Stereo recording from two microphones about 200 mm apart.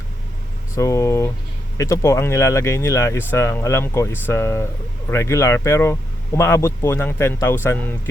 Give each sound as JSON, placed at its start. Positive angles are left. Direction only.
{"t": 0.8, "sound": "speech", "side_deg": 15}